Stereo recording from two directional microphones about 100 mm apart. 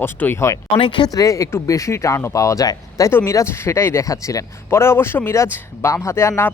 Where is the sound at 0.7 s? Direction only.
60° left (ahead or behind).